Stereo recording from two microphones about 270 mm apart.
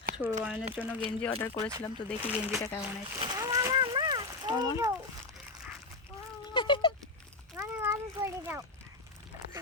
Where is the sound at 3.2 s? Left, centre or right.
Centre.